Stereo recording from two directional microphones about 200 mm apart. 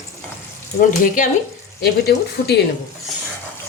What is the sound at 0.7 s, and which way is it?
Speech, 45° left (ahead or behind).